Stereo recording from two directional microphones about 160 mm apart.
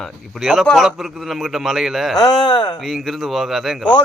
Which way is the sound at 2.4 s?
25° left (ahead or behind).